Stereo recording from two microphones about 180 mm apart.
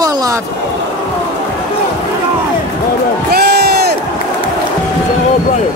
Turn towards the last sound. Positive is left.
turn(degrees=-65)  # may be behind; listen again after turning